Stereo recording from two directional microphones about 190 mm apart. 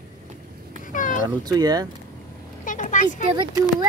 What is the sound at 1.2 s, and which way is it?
Speech, 20° right (ahead or behind).